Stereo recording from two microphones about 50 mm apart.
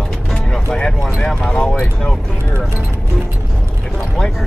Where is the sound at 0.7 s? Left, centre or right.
Centre.